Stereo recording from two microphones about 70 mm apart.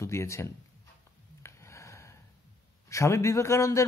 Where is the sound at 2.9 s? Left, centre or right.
Left.